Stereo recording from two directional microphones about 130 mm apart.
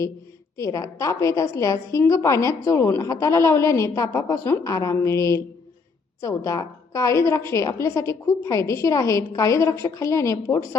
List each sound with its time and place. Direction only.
0.5 s a woman's voice: 25° left (ahead or behind)